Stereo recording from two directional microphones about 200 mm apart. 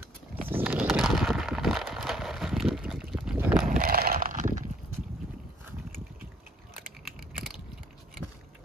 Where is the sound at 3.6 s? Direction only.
45° right (ahead or behind).